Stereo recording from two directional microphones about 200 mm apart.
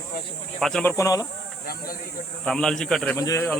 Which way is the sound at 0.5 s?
5° left (ahead or behind).